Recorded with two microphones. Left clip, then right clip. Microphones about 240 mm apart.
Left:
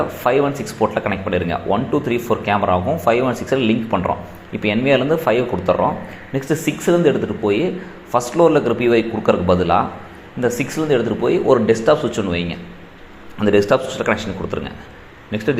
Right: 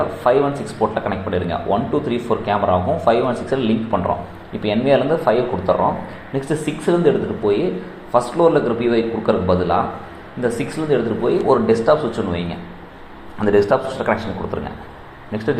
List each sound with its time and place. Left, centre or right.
0.2 s speech: left